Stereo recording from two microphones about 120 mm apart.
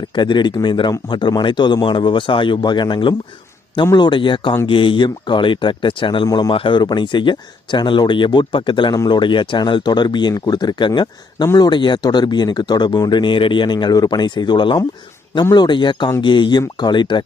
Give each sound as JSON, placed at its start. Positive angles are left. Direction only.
{"t": 0.1, "sound": "speech", "side_deg": 40}
{"t": 6.2, "sound": "speech", "side_deg": 30}
{"t": 6.5, "sound": "speech", "side_deg": 45}